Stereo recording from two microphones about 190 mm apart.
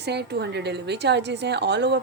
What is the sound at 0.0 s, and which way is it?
A woman's voice, 60° right (ahead or behind).